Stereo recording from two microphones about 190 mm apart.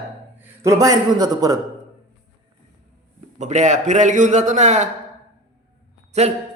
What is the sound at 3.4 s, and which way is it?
A man's voice, 40° right (ahead or behind).